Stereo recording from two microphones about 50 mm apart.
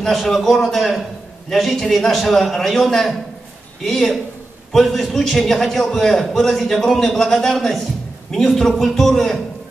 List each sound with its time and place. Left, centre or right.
0.0 s a man's voice: centre